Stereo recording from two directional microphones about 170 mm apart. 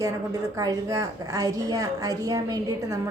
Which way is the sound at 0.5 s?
20° right (ahead or behind).